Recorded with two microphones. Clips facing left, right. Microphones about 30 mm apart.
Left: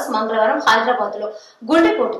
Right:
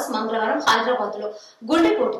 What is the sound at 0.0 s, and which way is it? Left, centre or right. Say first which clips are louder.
A woman's voice: left 6 dB; centre.